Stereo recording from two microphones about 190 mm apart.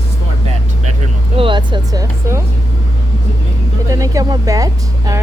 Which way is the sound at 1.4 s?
25° right (ahead or behind).